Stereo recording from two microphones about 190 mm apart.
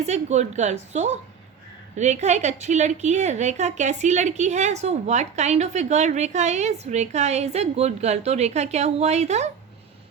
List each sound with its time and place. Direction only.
0.0 s a woman's voice: 35° right (ahead or behind)